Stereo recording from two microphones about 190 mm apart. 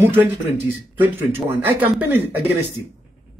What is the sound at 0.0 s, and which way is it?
Speech, 10° right (ahead or behind).